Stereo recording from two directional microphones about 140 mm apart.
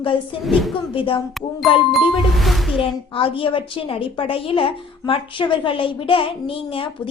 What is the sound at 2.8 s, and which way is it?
A woman's voice, 40° left (ahead or behind).